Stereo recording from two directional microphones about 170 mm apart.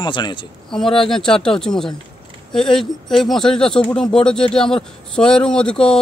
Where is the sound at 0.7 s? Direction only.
5° left (ahead or behind).